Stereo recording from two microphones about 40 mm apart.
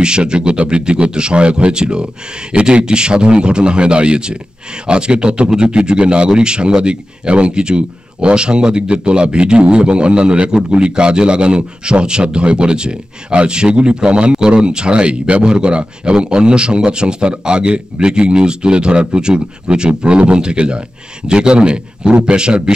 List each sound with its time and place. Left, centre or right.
0.0 s a man's voice: right